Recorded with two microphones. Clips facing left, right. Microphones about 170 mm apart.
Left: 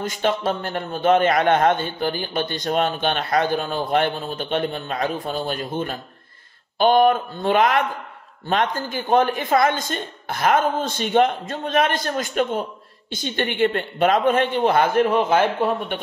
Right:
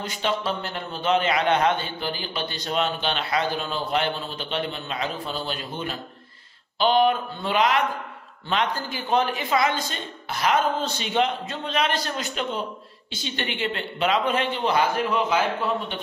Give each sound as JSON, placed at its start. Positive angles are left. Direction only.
{"t": 0.0, "sound": "a man's voice", "side_deg": 50}